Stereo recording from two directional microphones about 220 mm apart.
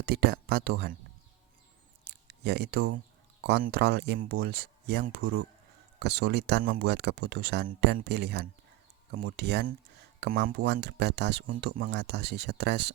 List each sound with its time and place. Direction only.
0.0 s speech: 45° right (ahead or behind)
2.0 s a sound: 50° right (ahead or behind)
3.4 s speech: 45° right (ahead or behind)